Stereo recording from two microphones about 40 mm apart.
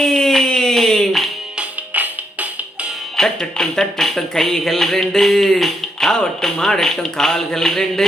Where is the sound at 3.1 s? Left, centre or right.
Centre.